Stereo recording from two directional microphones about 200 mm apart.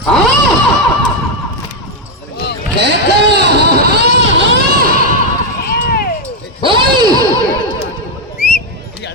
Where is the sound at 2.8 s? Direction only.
60° right (ahead or behind).